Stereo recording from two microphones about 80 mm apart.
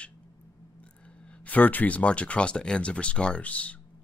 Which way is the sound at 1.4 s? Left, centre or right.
Left.